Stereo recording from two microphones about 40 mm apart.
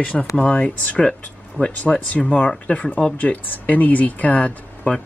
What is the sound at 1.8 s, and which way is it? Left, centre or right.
Speech, left.